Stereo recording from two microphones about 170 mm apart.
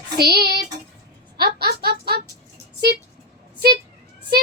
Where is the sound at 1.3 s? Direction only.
70° right (ahead or behind).